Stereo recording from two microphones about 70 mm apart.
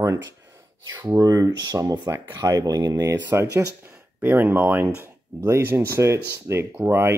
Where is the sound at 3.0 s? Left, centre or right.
Right.